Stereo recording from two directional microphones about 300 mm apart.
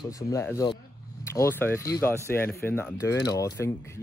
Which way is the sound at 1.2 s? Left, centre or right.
Centre.